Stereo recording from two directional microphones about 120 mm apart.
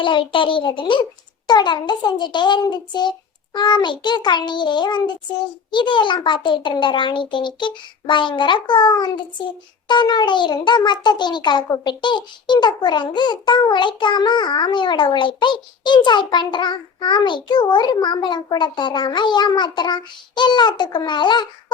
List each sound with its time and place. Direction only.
0.0 s a child's voice: 45° left (ahead or behind)